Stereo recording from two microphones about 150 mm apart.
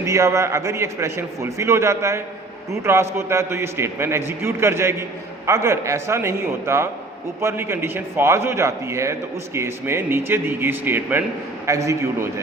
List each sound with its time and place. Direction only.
0.0 s a man's voice: 20° right (ahead or behind)